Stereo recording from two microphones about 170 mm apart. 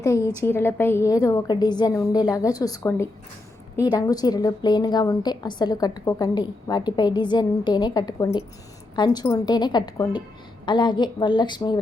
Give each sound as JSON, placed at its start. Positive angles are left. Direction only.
{"t": 0.0, "sound": "a woman's voice", "side_deg": 20}